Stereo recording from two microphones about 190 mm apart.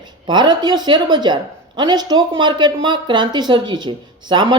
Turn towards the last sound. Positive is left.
turn(degrees=-25)  # may be behind; listen again after turning